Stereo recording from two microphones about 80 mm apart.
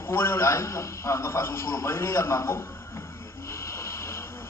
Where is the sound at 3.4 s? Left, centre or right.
Left.